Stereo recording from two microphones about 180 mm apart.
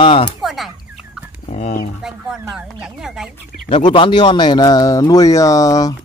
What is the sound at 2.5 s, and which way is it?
Speech, 5° right (ahead or behind).